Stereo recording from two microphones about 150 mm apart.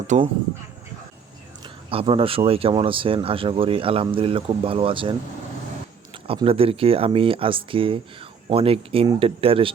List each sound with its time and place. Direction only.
0.1 s speech: 55° right (ahead or behind)
1.6 s speech: 35° right (ahead or behind)
6.2 s speech: 40° right (ahead or behind)